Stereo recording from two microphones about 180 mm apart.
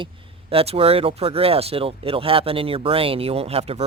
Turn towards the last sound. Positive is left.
turn(degrees=-35)  # may be behind; listen again after turning